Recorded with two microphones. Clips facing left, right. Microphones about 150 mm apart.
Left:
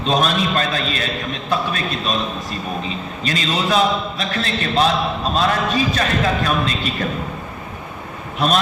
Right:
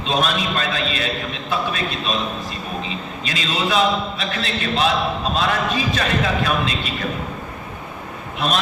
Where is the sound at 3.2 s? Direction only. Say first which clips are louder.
Left 3 dB; 40° left (ahead or behind).